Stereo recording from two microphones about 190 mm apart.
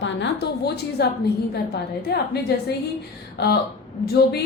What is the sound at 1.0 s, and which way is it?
A woman's voice, 60° left (ahead or behind).